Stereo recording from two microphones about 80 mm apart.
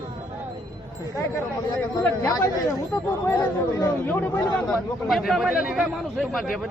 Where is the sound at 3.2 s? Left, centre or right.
Left.